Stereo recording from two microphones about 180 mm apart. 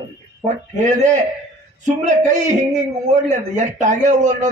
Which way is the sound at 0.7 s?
40° right (ahead or behind).